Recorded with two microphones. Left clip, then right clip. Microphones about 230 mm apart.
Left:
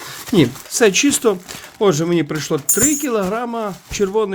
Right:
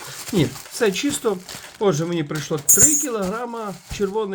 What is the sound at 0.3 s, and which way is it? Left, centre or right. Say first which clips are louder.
Speech: left 7 dB; left.